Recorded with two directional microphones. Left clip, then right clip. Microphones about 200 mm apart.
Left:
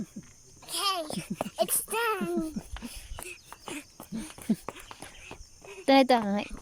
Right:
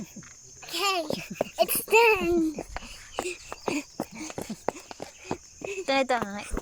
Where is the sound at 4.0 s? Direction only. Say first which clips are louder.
Right 7 dB; 45° right (ahead or behind).